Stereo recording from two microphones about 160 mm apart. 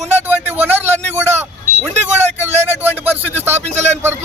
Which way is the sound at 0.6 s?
10° right (ahead or behind).